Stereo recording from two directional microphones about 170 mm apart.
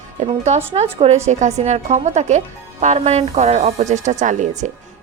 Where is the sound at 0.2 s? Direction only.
40° right (ahead or behind).